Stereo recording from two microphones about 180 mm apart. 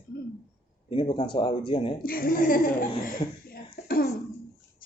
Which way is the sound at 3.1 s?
55° left (ahead or behind).